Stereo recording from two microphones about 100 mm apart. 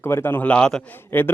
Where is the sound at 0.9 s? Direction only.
20° left (ahead or behind).